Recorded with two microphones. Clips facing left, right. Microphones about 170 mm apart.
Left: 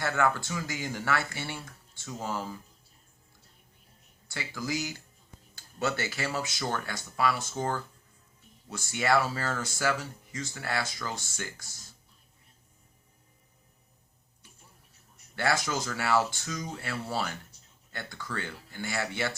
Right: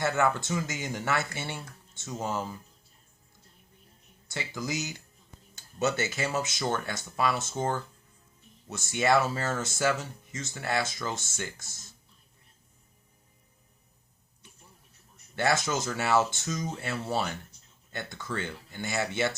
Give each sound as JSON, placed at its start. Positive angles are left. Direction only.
{"t": 0.0, "sound": "speech", "side_deg": -20}
{"t": 4.3, "sound": "speech", "side_deg": -20}
{"t": 15.4, "sound": "speech", "side_deg": -20}